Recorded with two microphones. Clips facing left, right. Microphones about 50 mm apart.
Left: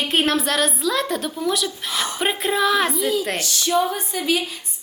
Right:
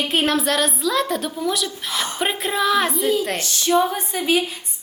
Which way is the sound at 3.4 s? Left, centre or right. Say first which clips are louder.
Right 3 dB; right.